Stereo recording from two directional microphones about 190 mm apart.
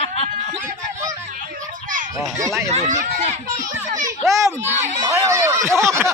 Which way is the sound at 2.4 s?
15° right (ahead or behind).